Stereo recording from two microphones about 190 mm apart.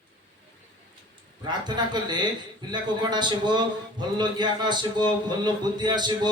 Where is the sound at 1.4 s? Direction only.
25° right (ahead or behind).